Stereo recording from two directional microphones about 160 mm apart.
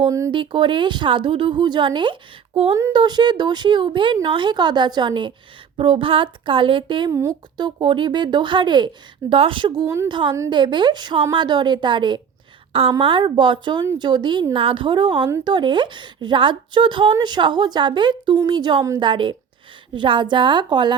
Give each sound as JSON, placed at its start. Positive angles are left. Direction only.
{"t": 0.3, "sound": "a woman's voice", "side_deg": -30}
{"t": 7.1, "sound": "a woman's voice", "side_deg": -20}